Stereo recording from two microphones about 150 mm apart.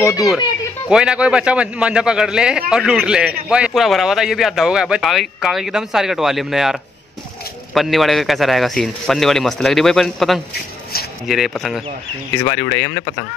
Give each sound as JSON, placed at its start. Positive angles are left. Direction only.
{"t": 0.0, "sound": "speech", "side_deg": 25}
{"t": 0.8, "sound": "speech", "side_deg": -5}
{"t": 12.4, "sound": "speech", "side_deg": 15}